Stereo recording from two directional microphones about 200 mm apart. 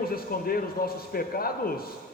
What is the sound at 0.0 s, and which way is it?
A man's voice, 50° left (ahead or behind).